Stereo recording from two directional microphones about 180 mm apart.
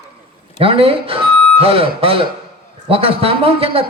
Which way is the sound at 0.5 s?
30° right (ahead or behind).